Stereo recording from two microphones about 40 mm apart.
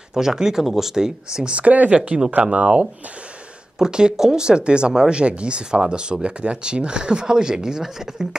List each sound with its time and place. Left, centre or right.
0.1 s speech: centre
1.5 s speech: right
3.7 s speech: centre